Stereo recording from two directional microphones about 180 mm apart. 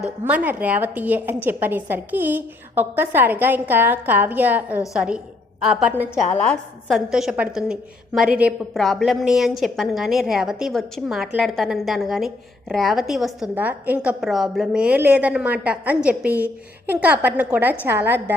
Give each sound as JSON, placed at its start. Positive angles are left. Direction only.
{"t": 0.3, "sound": "a woman's voice", "side_deg": -10}
{"t": 6.3, "sound": "a woman's voice", "side_deg": 5}